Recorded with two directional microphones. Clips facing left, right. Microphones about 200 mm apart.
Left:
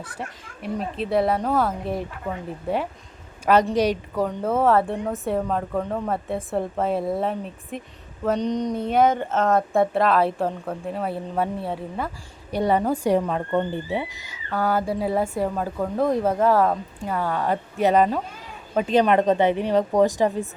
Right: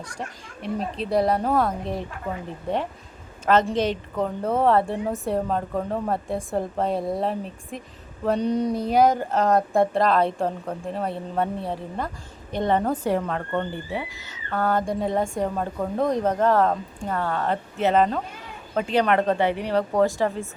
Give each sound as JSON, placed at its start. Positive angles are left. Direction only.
{"t": 0.0, "sound": "speech", "side_deg": 5}
{"t": 3.4, "sound": "a woman's voice", "side_deg": 10}
{"t": 8.2, "sound": "a sound", "side_deg": -5}
{"t": 8.8, "sound": "a woman's voice", "side_deg": 0}